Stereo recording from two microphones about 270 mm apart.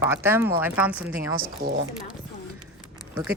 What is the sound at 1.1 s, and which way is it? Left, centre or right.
Speech, right.